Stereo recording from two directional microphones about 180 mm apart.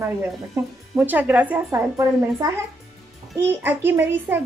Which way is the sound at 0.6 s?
10° right (ahead or behind).